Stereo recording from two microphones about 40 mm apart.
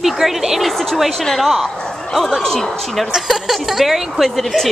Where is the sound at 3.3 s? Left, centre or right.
Centre.